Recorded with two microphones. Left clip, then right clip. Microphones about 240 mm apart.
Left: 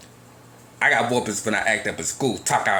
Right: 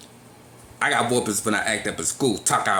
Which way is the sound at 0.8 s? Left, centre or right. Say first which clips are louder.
Left 2 dB; centre.